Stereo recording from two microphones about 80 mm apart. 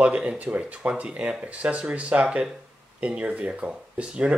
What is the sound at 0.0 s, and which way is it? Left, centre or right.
Speech, centre.